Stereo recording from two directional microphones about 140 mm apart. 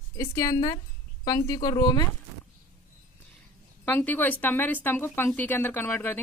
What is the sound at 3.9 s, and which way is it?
A woman's voice, 15° left (ahead or behind).